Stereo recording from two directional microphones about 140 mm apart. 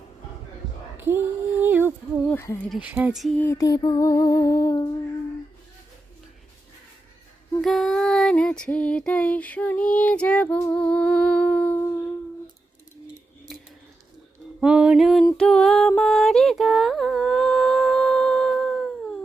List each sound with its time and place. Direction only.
0.9 s a sound: 15° right (ahead or behind)
2.2 s speech: 15° left (ahead or behind)
2.6 s speech: 10° right (ahead or behind)
3.3 s female singing: 15° left (ahead or behind)
3.6 s music: 30° left (ahead or behind)
7.6 s female singing: centre (ahead or behind)
14.6 s a sound: 5° right (ahead or behind)
15.4 s music: 5° left (ahead or behind)